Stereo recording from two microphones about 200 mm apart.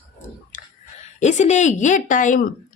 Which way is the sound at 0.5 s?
40° left (ahead or behind).